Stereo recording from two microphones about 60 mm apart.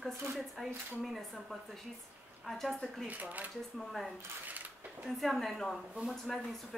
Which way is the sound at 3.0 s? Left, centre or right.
Right.